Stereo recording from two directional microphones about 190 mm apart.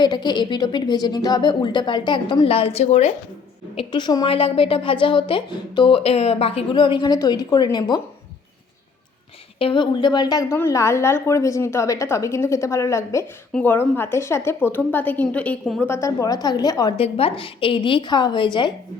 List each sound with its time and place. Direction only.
0.0 s a woman's voice: 25° left (ahead or behind)
9.6 s a woman's voice: 25° left (ahead or behind); by 15.9 s 5° left (ahead or behind)
15.9 s a woman's voice: 15° left (ahead or behind)